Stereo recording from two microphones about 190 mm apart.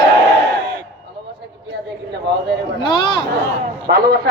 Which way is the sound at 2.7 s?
25° left (ahead or behind).